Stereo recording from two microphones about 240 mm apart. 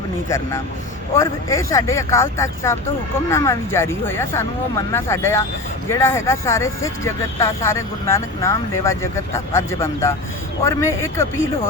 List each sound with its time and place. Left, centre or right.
0.3 s speech: centre